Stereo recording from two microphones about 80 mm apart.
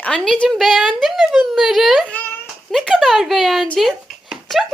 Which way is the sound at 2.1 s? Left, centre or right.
Left.